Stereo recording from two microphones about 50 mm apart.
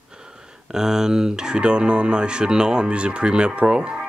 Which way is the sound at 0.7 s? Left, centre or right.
Centre.